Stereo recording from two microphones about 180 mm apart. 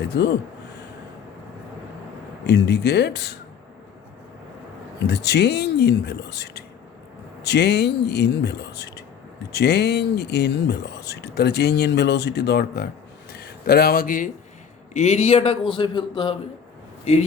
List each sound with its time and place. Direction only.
0.0 s speech: 70° left (ahead or behind)
2.5 s speech: 70° left (ahead or behind)
5.0 s speech: 65° left (ahead or behind); by 14.3 s 50° left (ahead or behind)
14.9 s a man's voice: 40° left (ahead or behind)